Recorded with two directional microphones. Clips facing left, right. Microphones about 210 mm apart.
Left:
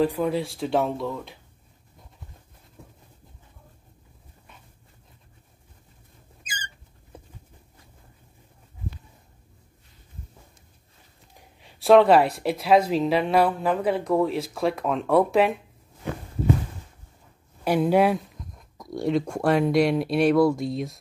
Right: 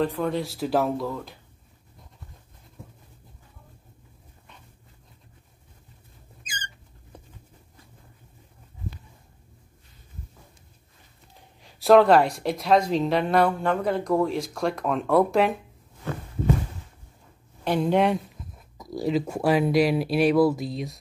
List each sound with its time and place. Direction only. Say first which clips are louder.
0.0 s speech: left 2 dB; 5° left (ahead or behind)
6.4 s squeak: left 1 dB; 5° left (ahead or behind)
11.6 s speech: even; centre (ahead or behind)
16.0 s heart sounds: left 1 dB; 15° left (ahead or behind)
17.6 s speech: left 2 dB; 5° left (ahead or behind)